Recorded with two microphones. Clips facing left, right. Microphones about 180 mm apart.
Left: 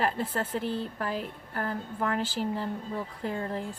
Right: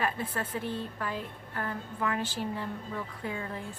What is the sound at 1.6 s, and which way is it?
Speech, 40° left (ahead or behind).